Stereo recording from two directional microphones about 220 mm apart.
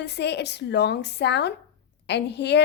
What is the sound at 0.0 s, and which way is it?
A woman's voice, 50° left (ahead or behind).